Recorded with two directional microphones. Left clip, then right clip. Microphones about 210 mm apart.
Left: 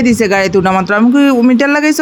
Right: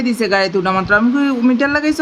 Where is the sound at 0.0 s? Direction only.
30° left (ahead or behind).